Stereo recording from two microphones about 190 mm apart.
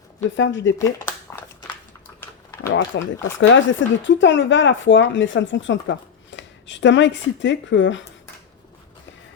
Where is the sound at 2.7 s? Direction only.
75° left (ahead or behind).